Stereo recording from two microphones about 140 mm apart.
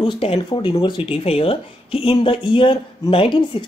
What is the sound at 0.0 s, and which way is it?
Speech, 40° left (ahead or behind).